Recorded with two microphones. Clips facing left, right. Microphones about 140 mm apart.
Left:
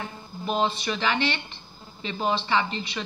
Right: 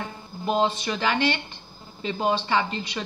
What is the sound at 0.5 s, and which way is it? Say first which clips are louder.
A woman's voice: right 2 dB; 40° right (ahead or behind).